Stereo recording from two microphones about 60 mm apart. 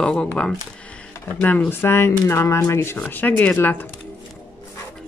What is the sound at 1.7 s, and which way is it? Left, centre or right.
Speech, left.